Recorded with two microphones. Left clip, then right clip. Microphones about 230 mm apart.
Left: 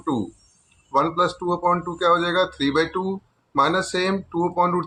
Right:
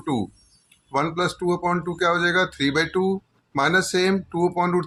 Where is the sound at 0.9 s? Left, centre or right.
Right.